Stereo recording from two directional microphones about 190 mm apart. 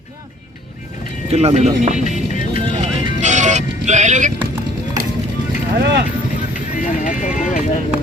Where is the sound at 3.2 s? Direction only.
40° right (ahead or behind).